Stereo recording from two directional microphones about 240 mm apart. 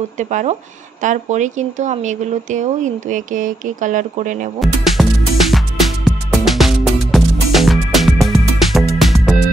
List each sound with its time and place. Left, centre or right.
0.2 s speech: right
4.6 s music: centre